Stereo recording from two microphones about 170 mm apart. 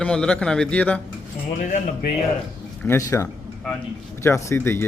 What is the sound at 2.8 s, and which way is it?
A man's voice, 15° left (ahead or behind).